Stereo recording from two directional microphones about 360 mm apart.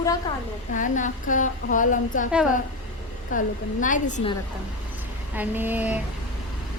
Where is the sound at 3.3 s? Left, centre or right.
Left.